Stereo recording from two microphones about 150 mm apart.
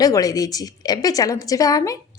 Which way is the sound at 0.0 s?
25° left (ahead or behind).